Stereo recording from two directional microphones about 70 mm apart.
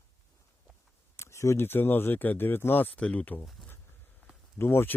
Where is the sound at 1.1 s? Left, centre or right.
Left.